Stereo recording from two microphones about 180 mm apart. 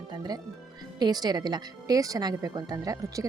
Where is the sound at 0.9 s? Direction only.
20° right (ahead or behind).